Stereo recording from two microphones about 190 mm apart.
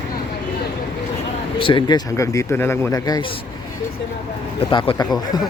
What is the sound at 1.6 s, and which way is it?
A man's voice, 25° left (ahead or behind).